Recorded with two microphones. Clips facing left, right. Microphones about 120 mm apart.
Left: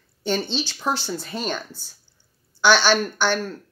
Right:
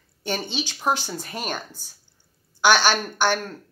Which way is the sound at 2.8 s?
45° right (ahead or behind).